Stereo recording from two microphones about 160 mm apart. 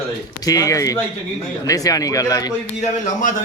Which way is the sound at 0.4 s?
20° left (ahead or behind).